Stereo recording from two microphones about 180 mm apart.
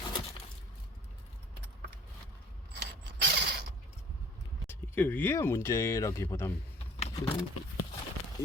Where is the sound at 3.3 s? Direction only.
65° right (ahead or behind).